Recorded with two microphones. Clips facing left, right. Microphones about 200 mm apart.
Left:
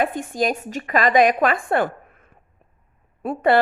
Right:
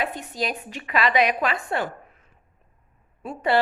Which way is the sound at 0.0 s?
50° left (ahead or behind).